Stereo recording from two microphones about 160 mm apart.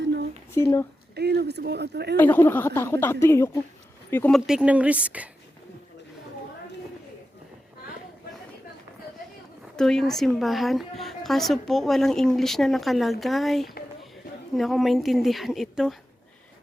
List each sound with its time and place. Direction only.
0.0 s a sound: 90° right
0.5 s a woman's voice: 15° left (ahead or behind)
1.1 s speech: 90° right
2.1 s a woman's voice: 10° left (ahead or behind)
4.4 s speech: 5° right (ahead or behind)
9.7 s a woman's voice: 5° left (ahead or behind)